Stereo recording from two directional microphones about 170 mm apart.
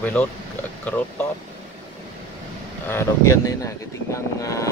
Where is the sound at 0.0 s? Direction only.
10° left (ahead or behind).